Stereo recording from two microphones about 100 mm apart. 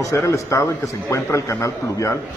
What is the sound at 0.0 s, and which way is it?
A man's voice, 30° left (ahead or behind).